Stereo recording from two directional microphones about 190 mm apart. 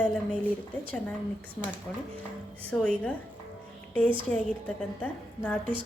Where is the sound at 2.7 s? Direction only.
5° left (ahead or behind).